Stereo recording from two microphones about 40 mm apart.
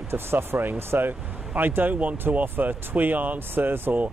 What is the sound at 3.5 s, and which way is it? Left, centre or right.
Speech, right.